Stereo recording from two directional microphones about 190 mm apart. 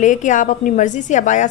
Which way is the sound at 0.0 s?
40° left (ahead or behind).